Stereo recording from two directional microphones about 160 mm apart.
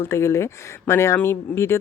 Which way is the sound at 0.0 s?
15° left (ahead or behind).